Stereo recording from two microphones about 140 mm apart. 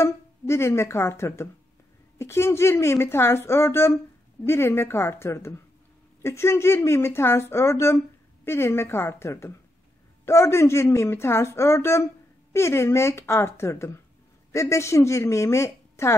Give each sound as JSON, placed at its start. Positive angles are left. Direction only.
{"t": 0.0, "sound": "a woman's voice", "side_deg": 20}